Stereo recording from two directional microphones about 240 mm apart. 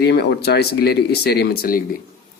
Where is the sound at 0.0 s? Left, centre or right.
Left.